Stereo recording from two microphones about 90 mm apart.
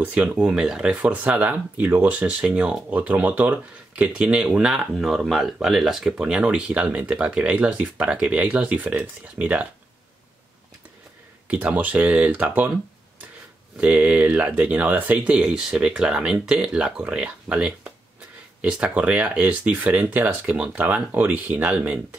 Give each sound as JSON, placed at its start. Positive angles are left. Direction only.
{"t": 0.0, "sound": "speech", "side_deg": -15}
{"t": 11.4, "sound": "speech", "side_deg": -15}
{"t": 13.7, "sound": "speech", "side_deg": -15}